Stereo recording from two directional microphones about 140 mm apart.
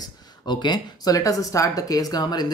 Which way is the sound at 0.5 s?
30° left (ahead or behind).